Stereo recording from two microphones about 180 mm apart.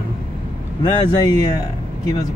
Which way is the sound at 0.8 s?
20° left (ahead or behind).